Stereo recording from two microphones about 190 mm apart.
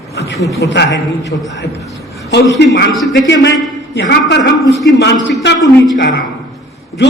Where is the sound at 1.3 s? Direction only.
55° left (ahead or behind).